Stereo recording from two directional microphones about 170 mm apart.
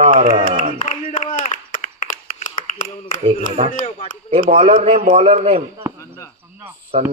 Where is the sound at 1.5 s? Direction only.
50° left (ahead or behind).